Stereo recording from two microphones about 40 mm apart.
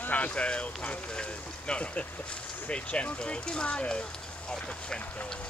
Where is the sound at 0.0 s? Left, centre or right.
Left.